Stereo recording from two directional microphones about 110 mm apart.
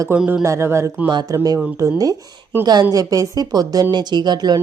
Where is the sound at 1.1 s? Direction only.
40° right (ahead or behind).